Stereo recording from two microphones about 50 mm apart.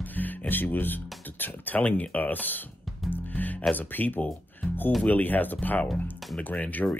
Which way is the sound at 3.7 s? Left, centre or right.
Left.